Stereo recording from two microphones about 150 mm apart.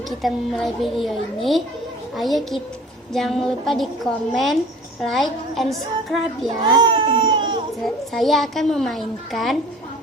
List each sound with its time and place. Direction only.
0.2 s a child's voice: centre (ahead or behind)
6.6 s baby cry: 30° right (ahead or behind)
7.9 s a child's voice: centre (ahead or behind)